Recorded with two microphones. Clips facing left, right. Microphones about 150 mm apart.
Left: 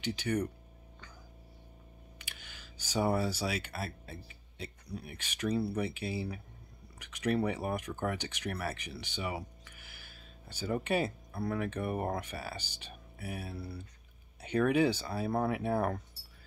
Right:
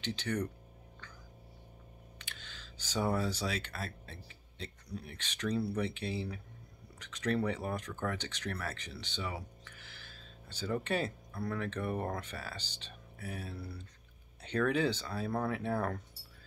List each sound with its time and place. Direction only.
0.0 s speech: 10° left (ahead or behind)
2.1 s speech: 10° left (ahead or behind)